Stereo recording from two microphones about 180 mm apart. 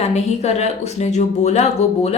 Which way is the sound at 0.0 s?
35° left (ahead or behind).